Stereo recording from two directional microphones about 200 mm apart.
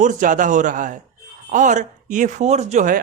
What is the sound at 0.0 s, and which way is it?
A man's voice, 40° right (ahead or behind).